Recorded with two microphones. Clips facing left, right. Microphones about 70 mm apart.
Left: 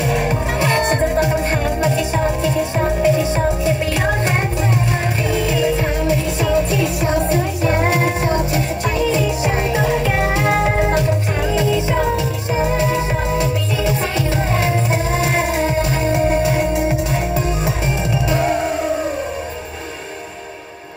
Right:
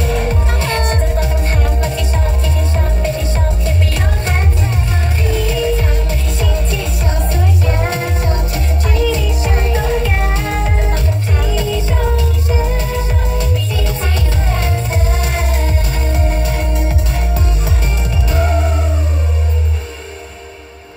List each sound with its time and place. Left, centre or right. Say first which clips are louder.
0.0 s music: even; centre